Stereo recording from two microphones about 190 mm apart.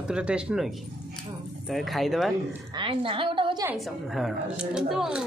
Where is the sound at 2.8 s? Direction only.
25° right (ahead or behind).